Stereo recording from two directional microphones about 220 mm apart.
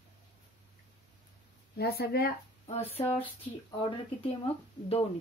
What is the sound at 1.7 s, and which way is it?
Speech, 45° left (ahead or behind).